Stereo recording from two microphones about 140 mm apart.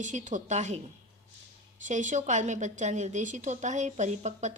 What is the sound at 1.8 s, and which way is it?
A woman's voice, 60° right (ahead or behind).